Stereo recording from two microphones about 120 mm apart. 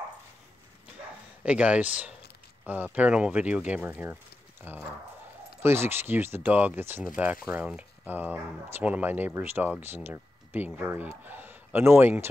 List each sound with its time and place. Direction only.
1.4 s speech: 10° right (ahead or behind)